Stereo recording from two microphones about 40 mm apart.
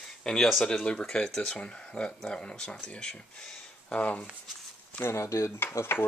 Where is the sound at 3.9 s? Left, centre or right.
Left.